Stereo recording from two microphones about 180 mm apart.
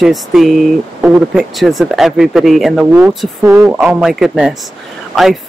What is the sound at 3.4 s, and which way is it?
Speech, 10° right (ahead or behind).